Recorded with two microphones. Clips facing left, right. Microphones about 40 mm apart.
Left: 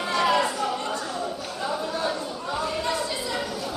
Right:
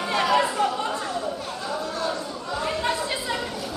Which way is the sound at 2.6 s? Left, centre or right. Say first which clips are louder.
Right 2 dB; right.